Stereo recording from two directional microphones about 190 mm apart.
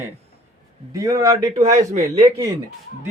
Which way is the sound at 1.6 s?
35° right (ahead or behind).